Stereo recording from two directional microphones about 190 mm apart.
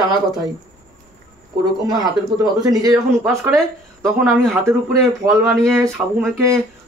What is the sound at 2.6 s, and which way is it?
Speech, 20° right (ahead or behind).